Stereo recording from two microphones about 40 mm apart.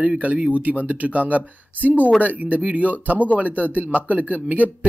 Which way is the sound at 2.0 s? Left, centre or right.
Left.